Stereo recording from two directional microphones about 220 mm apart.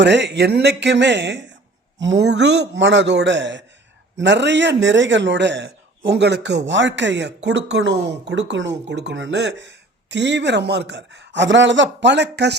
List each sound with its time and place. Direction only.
0.0 s speech: 50° right (ahead or behind)